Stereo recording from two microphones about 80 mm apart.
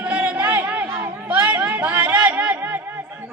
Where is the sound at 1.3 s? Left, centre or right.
Right.